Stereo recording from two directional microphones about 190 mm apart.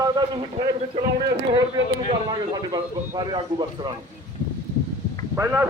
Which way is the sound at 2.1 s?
25° right (ahead or behind).